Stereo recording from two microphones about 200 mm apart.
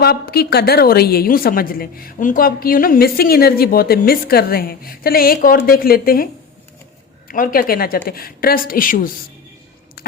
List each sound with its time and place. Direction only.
0.0 s a woman's voice: 50° left (ahead or behind)
7.3 s a woman's voice: 45° left (ahead or behind)
10.0 s a sound: 50° left (ahead or behind)